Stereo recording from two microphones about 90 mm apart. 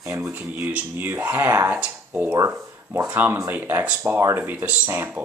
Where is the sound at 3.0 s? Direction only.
20° right (ahead or behind).